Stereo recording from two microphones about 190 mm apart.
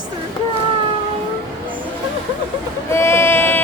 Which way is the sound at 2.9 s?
15° left (ahead or behind).